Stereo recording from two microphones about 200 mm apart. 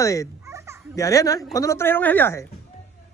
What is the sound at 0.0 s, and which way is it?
Speech, 15° left (ahead or behind).